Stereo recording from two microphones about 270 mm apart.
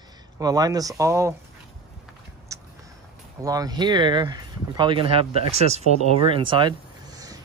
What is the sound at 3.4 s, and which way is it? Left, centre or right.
Speech, centre.